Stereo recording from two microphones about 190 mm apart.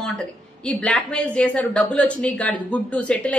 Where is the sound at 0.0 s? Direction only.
5° left (ahead or behind).